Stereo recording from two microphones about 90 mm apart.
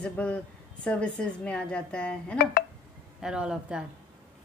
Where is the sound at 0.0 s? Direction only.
15° left (ahead or behind).